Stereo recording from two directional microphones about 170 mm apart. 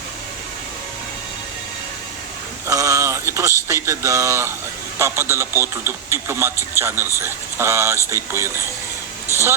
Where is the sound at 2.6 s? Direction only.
20° right (ahead or behind).